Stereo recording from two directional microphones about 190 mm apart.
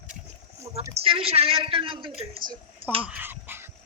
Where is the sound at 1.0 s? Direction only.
30° right (ahead or behind).